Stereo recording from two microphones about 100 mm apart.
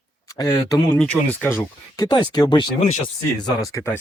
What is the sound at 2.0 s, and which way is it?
Speech, 45° left (ahead or behind).